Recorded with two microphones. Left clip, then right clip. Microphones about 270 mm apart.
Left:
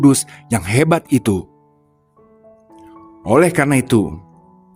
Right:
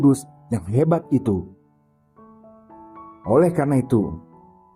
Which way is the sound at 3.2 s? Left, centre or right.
Left.